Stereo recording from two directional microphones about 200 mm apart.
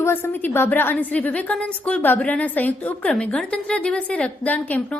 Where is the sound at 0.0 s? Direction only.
10° left (ahead or behind).